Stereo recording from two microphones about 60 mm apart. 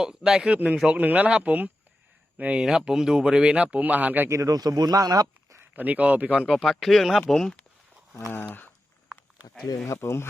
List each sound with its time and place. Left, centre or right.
0.0 s speech: centre
2.6 s speech: centre; by 4.3 s right
4.3 s speech: right
5.7 s speech: right
6.5 s speech: centre
8.4 s speech: left
9.8 s speech: left